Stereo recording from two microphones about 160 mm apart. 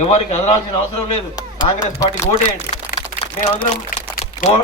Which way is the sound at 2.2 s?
45° left (ahead or behind).